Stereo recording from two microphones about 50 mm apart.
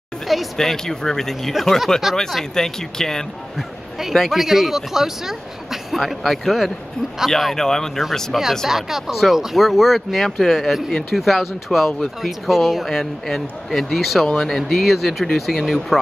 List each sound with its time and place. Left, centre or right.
0.3 s speech: centre
3.5 s speech: centre
8.6 s speech: centre
14.2 s speech: centre
14.5 s speech: centre